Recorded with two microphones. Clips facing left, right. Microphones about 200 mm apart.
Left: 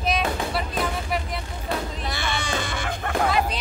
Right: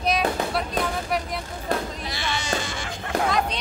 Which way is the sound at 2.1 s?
55° left (ahead or behind).